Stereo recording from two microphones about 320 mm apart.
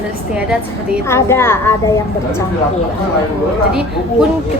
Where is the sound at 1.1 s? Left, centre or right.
Centre.